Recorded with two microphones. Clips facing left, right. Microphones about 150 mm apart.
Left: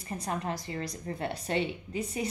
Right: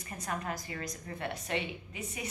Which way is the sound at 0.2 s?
25° left (ahead or behind).